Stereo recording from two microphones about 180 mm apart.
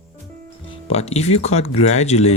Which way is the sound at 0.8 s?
35° left (ahead or behind).